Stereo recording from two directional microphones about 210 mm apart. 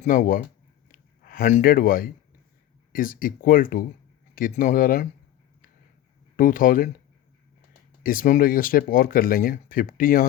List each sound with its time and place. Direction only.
0.0 s speech: 40° left (ahead or behind)
0.9 s a sound: 40° left (ahead or behind)
2.9 s speech: 40° left (ahead or behind)
6.3 s speech: 40° left (ahead or behind)
8.0 s speech: 40° left (ahead or behind)